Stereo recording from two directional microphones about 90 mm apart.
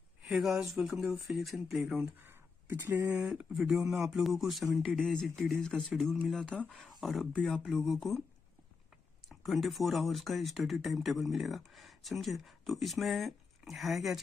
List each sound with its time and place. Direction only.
0.2 s speech: 5° right (ahead or behind)
2.1 s a sound: 25° right (ahead or behind)
3.1 s speech: 15° right (ahead or behind); by 8.2 s centre (ahead or behind)
9.3 s speech: centre (ahead or behind)